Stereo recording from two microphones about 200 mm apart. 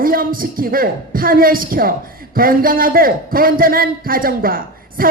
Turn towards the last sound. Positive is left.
turn(degrees=-45)  # may be behind; listen again after turning